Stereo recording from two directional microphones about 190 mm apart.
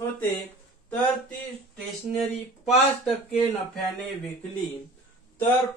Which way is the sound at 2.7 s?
Centre (ahead or behind).